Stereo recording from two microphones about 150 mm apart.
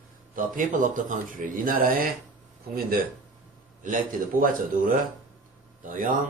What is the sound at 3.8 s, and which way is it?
Speech, 65° right (ahead or behind).